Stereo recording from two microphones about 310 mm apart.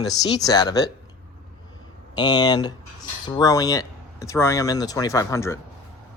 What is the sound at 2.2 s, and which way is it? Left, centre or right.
Speech, centre.